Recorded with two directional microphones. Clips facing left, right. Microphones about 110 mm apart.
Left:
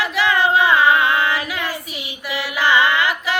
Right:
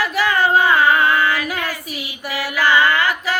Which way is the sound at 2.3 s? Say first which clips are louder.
Right 1 dB; 45° right (ahead or behind).